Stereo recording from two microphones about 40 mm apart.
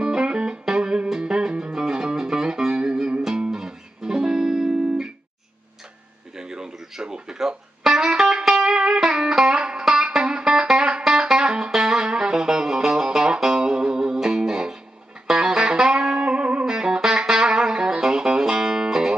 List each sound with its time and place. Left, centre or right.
0.0 s music: right
6.3 s music: centre